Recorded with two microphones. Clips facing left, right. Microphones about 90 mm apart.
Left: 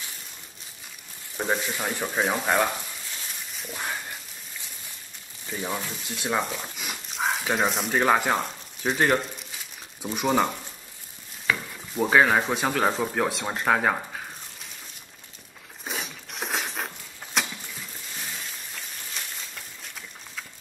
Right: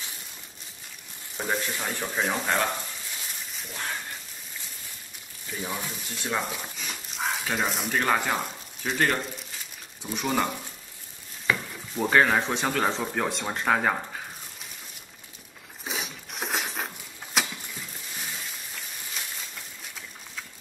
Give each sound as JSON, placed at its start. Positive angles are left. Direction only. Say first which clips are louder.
{"t": 1.5, "sound": "speech", "louder": "left 2 dB", "side_deg": 5}
{"t": 3.1, "sound": "a sound", "louder": "even", "side_deg": 0}
{"t": 5.6, "sound": "speech", "louder": "left 2 dB", "side_deg": 15}
{"t": 7.2, "sound": "dog", "louder": "left 3 dB", "side_deg": 0}
{"t": 7.9, "sound": "speech", "louder": "left 3 dB", "side_deg": 10}
{"t": 15.8, "sound": "a sound", "louder": "even", "side_deg": 0}